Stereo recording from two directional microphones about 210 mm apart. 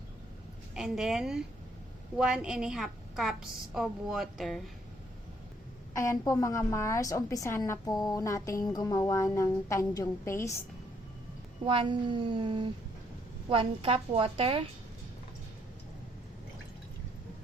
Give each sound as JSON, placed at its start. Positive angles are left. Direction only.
{"t": 0.7, "sound": "a woman's voice", "side_deg": -5}
{"t": 5.9, "sound": "a woman's voice", "side_deg": 15}
{"t": 11.6, "sound": "speech", "side_deg": -25}